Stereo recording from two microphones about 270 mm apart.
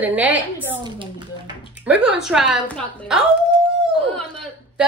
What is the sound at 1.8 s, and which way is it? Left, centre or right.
A woman's voice, centre.